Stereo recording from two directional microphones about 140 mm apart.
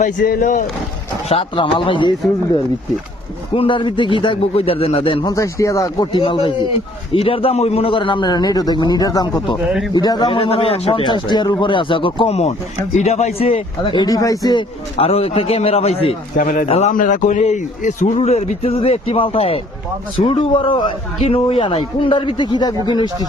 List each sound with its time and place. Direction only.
0.0 s speech: 80° left
1.3 s a man's voice: 40° left (ahead or behind)
3.5 s a man's voice: 40° left (ahead or behind)
5.3 s speech: 20° left (ahead or behind)
6.1 s a man's voice: 35° left (ahead or behind)
9.6 s a man's voice: centre (ahead or behind)
9.9 s a man's voice: 30° left (ahead or behind)
14.9 s a man's voice: 45° left (ahead or behind)
16.4 s speech: 75° left (ahead or behind)
16.6 s a man's voice: 45° left (ahead or behind)
16.9 s a man's voice: 70° left (ahead or behind); by 23.0 s 30° left (ahead or behind)